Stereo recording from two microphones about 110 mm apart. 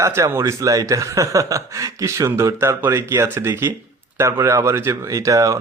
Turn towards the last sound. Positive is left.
turn(degrees=-30)  # may be behind; listen again after turning